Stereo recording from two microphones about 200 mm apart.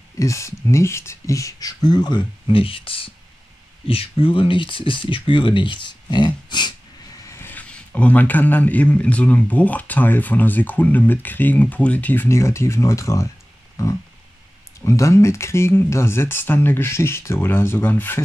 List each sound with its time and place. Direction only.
0.2 s speech: 15° left (ahead or behind)
7.2 s a man's voice: 10° left (ahead or behind)